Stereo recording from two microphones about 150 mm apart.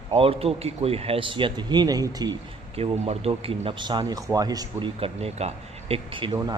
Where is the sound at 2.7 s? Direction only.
40° right (ahead or behind).